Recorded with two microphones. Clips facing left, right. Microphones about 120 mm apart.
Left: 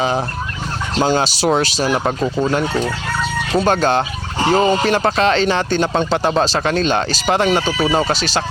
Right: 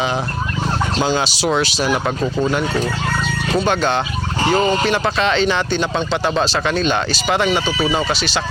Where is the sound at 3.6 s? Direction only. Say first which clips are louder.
Left 4 dB; 40° left (ahead or behind).